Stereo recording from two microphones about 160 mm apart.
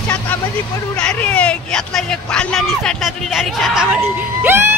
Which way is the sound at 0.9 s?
5° left (ahead or behind).